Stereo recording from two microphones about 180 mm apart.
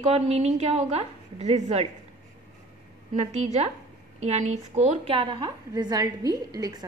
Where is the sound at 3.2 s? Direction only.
40° right (ahead or behind).